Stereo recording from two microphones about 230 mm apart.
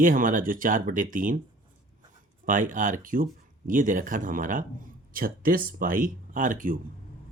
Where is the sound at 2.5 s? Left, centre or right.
Right.